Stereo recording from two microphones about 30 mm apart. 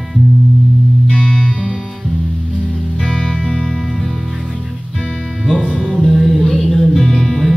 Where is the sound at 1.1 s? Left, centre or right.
Left.